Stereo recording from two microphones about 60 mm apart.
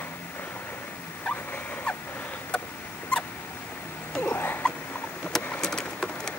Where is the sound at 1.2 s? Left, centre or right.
Left.